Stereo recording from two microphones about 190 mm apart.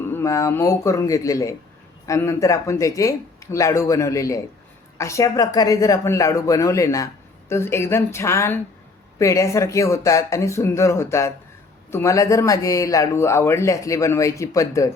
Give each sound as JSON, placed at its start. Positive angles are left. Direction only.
{"t": 0.1, "sound": "a woman's voice", "side_deg": 15}